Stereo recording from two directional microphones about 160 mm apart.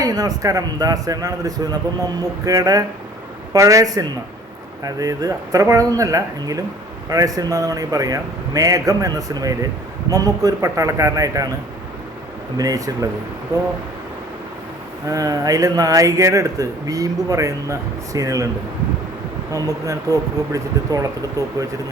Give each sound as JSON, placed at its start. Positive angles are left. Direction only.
{"t": 0.0, "sound": "a man's voice", "side_deg": -25}
{"t": 12.5, "sound": "a man's voice", "side_deg": -25}
{"t": 15.0, "sound": "a man's voice", "side_deg": -20}
{"t": 19.5, "sound": "a man's voice", "side_deg": -20}